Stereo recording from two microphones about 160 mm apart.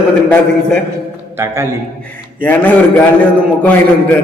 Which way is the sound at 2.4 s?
10° left (ahead or behind).